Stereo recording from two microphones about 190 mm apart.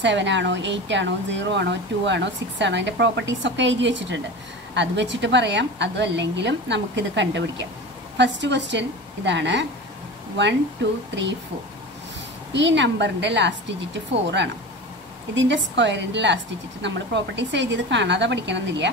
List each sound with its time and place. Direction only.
0.0 s speech: 70° right (ahead or behind)
10.8 s speech: 70° right (ahead or behind)
12.5 s speech: 70° right (ahead or behind)